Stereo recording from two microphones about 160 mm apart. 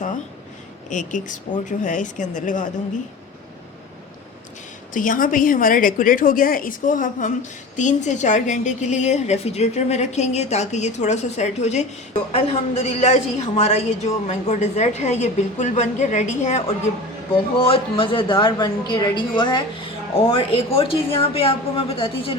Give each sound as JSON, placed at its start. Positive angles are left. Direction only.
{"t": 0.9, "sound": "a woman's voice", "side_deg": 50}
{"t": 4.9, "sound": "a woman's voice", "side_deg": 55}
{"t": 17.3, "sound": "a woman's voice", "side_deg": 35}